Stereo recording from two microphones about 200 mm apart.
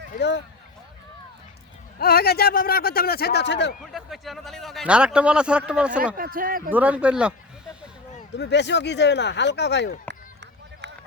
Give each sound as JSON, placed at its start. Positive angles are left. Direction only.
{"t": 0.2, "sound": "speech", "side_deg": 60}
{"t": 2.0, "sound": "a man's voice", "side_deg": 50}
{"t": 3.9, "sound": "a man's voice", "side_deg": 0}
{"t": 6.1, "sound": "a man's voice", "side_deg": -45}
{"t": 6.7, "sound": "speech", "side_deg": -10}
{"t": 8.4, "sound": "speech", "side_deg": 60}